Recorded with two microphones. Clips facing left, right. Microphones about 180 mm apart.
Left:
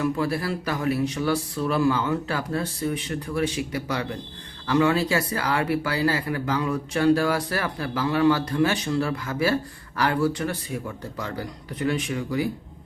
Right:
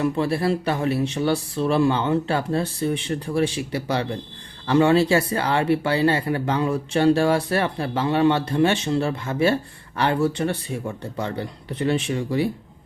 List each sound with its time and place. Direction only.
0.0 s speech: 25° right (ahead or behind)